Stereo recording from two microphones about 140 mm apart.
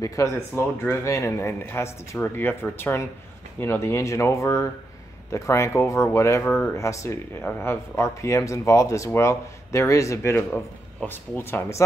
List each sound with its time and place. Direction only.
0.0 s speech: 25° left (ahead or behind)